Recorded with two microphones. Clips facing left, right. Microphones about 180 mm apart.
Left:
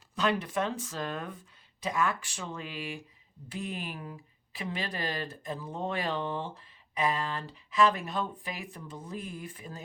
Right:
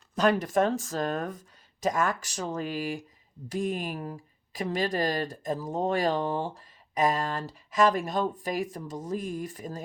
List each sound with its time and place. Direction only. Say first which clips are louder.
0.2 s speech: right 6 dB; 45° right (ahead or behind)